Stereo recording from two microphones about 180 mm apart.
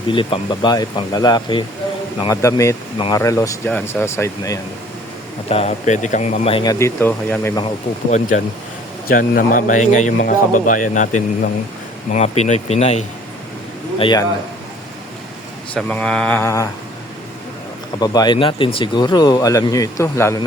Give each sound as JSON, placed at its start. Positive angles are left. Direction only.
{"t": 0.1, "sound": "speech", "side_deg": 25}
{"t": 2.2, "sound": "mantra", "side_deg": 15}
{"t": 5.5, "sound": "speech", "side_deg": 35}
{"t": 9.0, "sound": "speech", "side_deg": 55}
{"t": 14.0, "sound": "speech", "side_deg": 25}
{"t": 15.7, "sound": "mantra", "side_deg": 5}
{"t": 18.0, "sound": "speech", "side_deg": 20}